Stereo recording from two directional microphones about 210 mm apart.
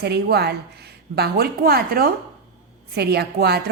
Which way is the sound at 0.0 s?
50° right (ahead or behind).